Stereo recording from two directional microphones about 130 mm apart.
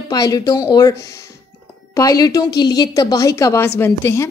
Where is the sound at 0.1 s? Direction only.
30° left (ahead or behind).